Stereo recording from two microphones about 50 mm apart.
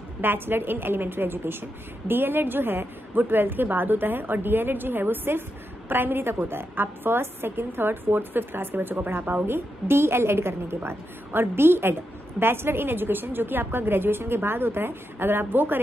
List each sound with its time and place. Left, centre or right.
0.2 s a woman's voice: right